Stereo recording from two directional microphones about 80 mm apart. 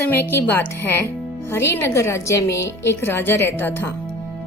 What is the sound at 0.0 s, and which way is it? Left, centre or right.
A woman's voice, left.